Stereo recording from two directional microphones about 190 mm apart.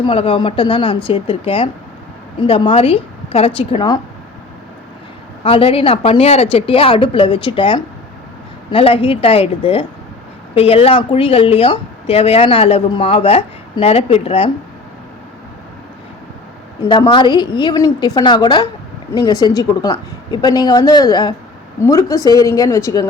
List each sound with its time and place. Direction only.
0.0 s a woman's voice: 30° left (ahead or behind)
5.4 s a woman's voice: 30° left (ahead or behind)
16.9 s a woman's voice: 25° left (ahead or behind)